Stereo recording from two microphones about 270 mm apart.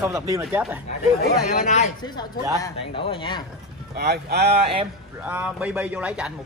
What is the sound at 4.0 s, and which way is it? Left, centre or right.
Speech, right.